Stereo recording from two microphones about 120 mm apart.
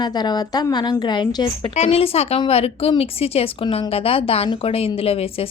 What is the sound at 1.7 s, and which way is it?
A woman's voice, 60° left (ahead or behind).